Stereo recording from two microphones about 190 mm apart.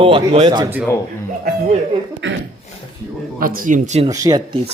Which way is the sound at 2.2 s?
75° right (ahead or behind).